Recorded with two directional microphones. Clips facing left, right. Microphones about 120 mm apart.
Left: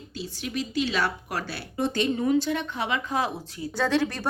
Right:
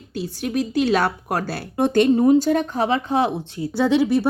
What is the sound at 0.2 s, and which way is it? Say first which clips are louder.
A woman's voice: right 8 dB; 50° right (ahead or behind).